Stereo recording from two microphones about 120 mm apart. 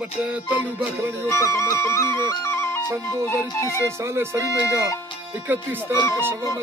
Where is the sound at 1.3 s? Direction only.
25° left (ahead or behind).